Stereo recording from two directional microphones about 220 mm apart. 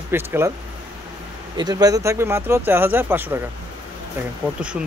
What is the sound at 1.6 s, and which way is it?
Speech, 20° right (ahead or behind).